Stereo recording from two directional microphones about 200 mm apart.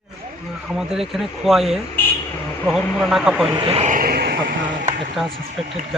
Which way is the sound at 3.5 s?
25° right (ahead or behind).